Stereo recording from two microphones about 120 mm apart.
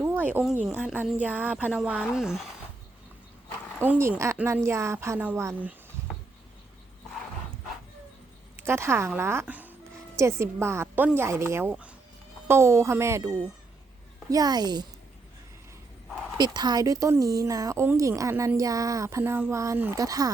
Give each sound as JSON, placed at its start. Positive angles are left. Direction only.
{"t": 0.0, "sound": "a sound", "side_deg": -15}
{"t": 1.0, "sound": "speech", "side_deg": -15}
{"t": 3.8, "sound": "speech", "side_deg": -20}
{"t": 8.5, "sound": "a woman's voice", "side_deg": -20}
{"t": 11.7, "sound": "speech", "side_deg": -10}
{"t": 12.5, "sound": "a woman's voice", "side_deg": -20}
{"t": 16.4, "sound": "speech", "side_deg": -35}